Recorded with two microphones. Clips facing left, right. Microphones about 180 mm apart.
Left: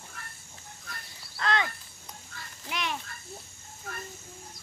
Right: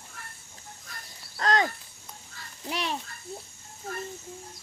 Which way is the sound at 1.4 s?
40° right (ahead or behind).